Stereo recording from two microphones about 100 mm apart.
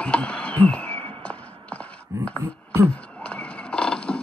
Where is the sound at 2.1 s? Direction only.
30° right (ahead or behind).